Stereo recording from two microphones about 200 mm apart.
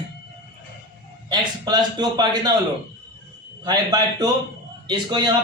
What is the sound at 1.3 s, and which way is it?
A man's voice, 20° right (ahead or behind).